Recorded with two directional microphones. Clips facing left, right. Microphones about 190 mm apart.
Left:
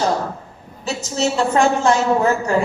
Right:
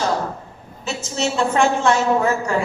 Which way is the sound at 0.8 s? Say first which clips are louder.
Left 3 dB; 35° left (ahead or behind).